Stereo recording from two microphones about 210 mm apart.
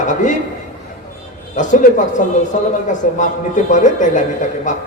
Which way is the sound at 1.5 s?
35° left (ahead or behind).